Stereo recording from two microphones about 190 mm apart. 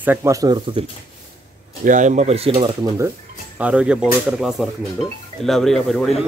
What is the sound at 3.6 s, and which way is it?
Speech, 5° right (ahead or behind).